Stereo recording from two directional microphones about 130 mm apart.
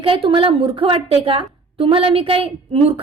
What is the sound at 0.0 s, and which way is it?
A woman's voice, 45° right (ahead or behind).